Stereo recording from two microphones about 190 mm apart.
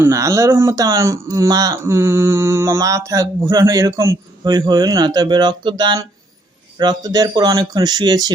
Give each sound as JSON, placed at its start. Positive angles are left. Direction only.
{"t": 0.0, "sound": "a man's voice", "side_deg": -15}